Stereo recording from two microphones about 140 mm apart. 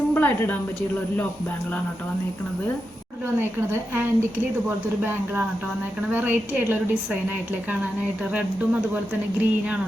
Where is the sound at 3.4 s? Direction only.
15° right (ahead or behind).